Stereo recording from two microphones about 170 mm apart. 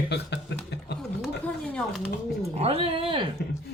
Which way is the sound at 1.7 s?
5° left (ahead or behind).